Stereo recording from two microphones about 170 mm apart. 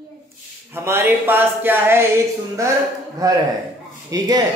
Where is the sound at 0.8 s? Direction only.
15° right (ahead or behind).